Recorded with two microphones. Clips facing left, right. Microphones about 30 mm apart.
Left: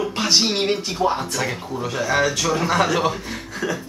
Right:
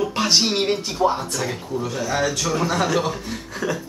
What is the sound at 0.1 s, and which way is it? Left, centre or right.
Speech, centre.